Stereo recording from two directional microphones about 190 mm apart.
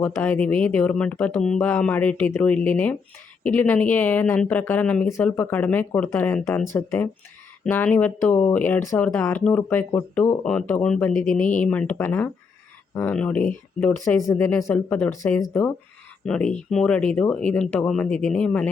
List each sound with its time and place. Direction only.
0.0 s speech: 10° left (ahead or behind)